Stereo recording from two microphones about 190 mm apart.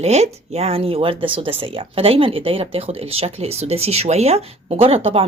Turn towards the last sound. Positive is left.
turn(degrees=-30)  # may be behind; listen again after turning